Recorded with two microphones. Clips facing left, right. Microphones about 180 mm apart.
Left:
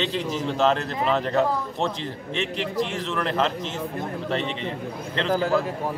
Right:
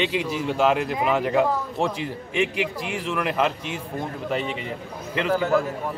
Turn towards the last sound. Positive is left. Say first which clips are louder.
# right 1 dB
turn(degrees=35)  # may be behind; listen again after turning